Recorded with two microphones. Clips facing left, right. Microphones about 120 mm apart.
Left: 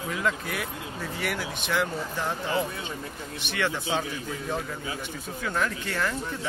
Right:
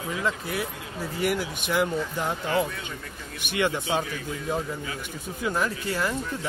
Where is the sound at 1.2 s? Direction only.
10° right (ahead or behind).